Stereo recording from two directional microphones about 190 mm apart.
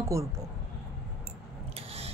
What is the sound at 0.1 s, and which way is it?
Speech, 15° right (ahead or behind).